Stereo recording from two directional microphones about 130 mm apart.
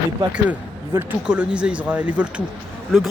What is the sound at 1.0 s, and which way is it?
Speech, 10° right (ahead or behind).